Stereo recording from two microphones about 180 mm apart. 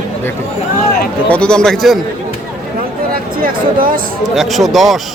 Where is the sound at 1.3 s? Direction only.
5° left (ahead or behind).